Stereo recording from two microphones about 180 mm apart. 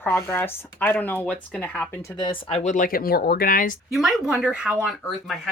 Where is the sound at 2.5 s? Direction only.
40° left (ahead or behind).